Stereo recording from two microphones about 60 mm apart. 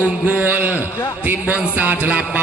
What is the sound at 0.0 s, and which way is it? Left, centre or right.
Speech, right.